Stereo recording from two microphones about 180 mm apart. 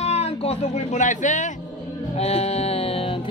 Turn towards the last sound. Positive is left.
turn(degrees=30)  # may be behind; listen again after turning